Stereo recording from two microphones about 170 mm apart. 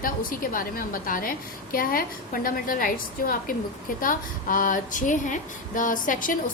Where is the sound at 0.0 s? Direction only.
55° left (ahead or behind).